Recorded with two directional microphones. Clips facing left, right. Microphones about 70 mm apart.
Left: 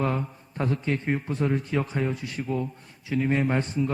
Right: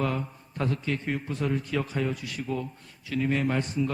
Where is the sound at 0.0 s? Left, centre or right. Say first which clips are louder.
Left 2 dB; left.